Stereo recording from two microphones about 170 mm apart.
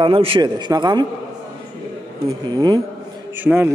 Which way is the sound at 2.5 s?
25° right (ahead or behind).